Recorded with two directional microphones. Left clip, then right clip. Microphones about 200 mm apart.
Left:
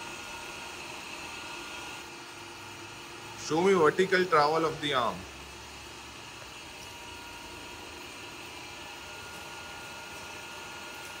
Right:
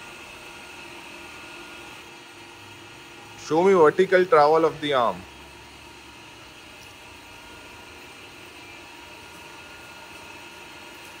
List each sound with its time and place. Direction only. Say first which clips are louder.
3.4 s speech: right 7 dB; 10° left (ahead or behind)